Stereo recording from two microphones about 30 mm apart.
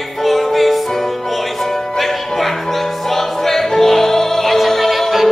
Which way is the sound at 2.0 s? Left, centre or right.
Centre.